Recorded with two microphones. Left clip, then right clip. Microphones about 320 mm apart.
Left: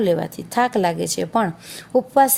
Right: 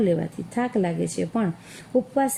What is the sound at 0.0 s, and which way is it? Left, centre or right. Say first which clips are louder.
A woman's voice: left 4 dB; left.